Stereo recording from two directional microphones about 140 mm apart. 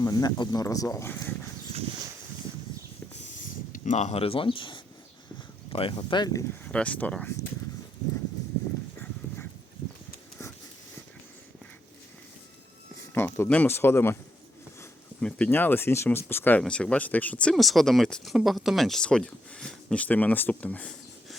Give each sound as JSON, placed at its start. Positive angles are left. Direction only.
{"t": 0.0, "sound": "speech", "side_deg": 25}
{"t": 3.2, "sound": "a sound", "side_deg": 65}
{"t": 5.7, "sound": "speech", "side_deg": 40}
{"t": 6.7, "sound": "speech", "side_deg": 10}
{"t": 13.1, "sound": "speech", "side_deg": 15}
{"t": 15.2, "sound": "speech", "side_deg": 10}